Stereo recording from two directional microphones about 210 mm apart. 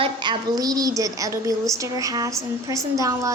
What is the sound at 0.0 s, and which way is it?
A woman's voice, 20° right (ahead or behind).